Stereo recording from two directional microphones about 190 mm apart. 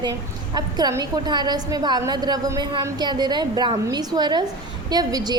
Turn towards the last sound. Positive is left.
turn(degrees=-20)  # may be behind; listen again after turning